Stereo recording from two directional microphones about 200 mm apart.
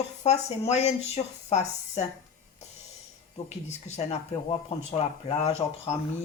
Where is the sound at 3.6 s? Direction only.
35° left (ahead or behind).